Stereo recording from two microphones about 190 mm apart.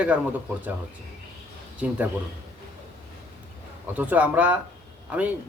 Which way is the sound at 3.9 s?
5° right (ahead or behind).